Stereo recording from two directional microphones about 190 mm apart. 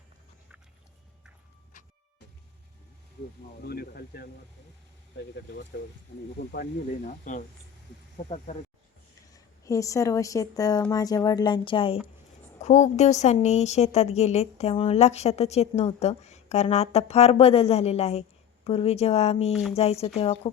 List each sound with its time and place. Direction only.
1.7 s music: 45° left (ahead or behind)
3.6 s speech: 55° left (ahead or behind)
6.5 s speech: 50° left (ahead or behind)
9.3 s speech: 15° left (ahead or behind)
12.6 s a woman's voice: 40° left (ahead or behind)